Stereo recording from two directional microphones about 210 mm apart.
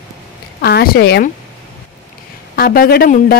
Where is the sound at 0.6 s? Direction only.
50° left (ahead or behind).